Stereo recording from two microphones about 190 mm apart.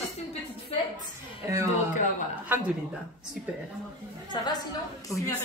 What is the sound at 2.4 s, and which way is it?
Speech, 10° right (ahead or behind).